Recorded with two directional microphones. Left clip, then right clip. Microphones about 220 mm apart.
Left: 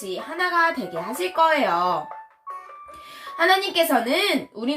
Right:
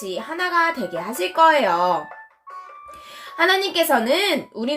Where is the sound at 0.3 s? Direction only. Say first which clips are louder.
Right 1 dB; 55° right (ahead or behind).